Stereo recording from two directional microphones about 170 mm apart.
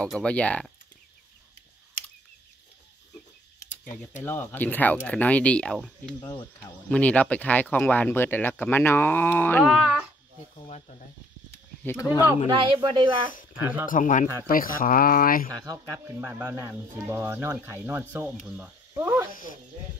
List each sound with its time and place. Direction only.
0.0 s speech: 5° left (ahead or behind)
4.2 s speech: 10° left (ahead or behind)
6.2 s speech: 20° left (ahead or behind)
9.7 s speech: 5° right (ahead or behind)
11.8 s speech: 10° left (ahead or behind)
12.5 s speech: 30° right (ahead or behind)
13.3 s speech: 50° left (ahead or behind)
13.6 s speech: 10° right (ahead or behind)
13.8 s speech: 50° left (ahead or behind)
15.6 s speech: 15° right (ahead or behind)